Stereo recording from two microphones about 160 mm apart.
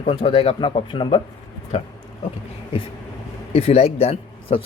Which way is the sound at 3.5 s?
40° left (ahead or behind).